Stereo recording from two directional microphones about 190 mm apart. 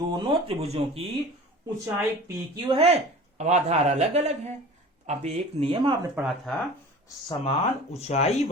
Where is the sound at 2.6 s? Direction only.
30° right (ahead or behind).